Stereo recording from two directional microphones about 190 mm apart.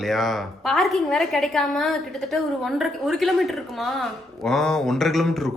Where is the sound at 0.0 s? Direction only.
Centre (ahead or behind).